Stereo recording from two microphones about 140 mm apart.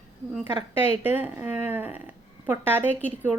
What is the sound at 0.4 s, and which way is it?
Speech, 15° right (ahead or behind).